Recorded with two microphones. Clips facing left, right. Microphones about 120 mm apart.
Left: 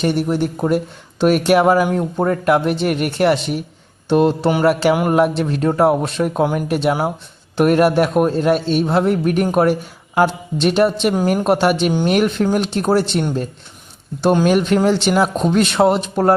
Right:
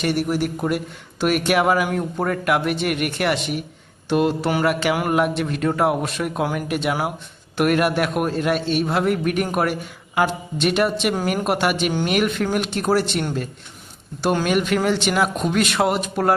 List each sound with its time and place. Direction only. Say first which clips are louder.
0.0 s a man's voice: left 3 dB; 25° left (ahead or behind)
6.7 s a man's voice: left 5 dB; 35° left (ahead or behind)
14.4 s a man's voice: left 5 dB; 35° left (ahead or behind)